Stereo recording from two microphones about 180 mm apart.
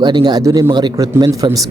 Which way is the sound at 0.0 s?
25° right (ahead or behind).